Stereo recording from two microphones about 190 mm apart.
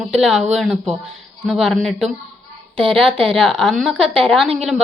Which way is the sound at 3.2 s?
Centre (ahead or behind).